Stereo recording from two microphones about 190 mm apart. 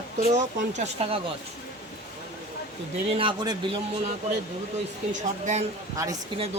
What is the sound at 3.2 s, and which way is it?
Speech, 25° right (ahead or behind).